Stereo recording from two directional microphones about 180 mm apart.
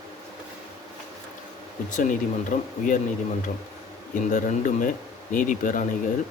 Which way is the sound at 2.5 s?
45° left (ahead or behind).